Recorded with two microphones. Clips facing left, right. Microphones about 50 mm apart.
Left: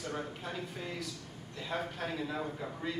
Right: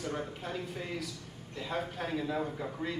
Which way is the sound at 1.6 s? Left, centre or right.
Centre.